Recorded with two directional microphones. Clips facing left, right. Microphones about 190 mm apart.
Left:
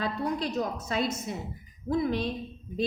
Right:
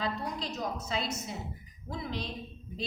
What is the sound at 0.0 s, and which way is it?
A woman's voice, 55° left (ahead or behind).